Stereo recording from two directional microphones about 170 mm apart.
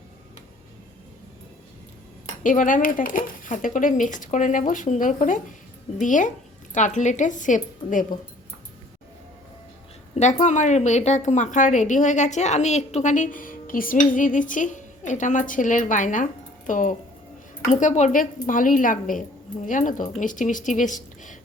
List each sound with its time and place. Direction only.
2.4 s a woman's voice: 50° left (ahead or behind)
10.4 s a woman's voice: 45° left (ahead or behind)